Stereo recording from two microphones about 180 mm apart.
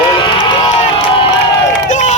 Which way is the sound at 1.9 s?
40° left (ahead or behind).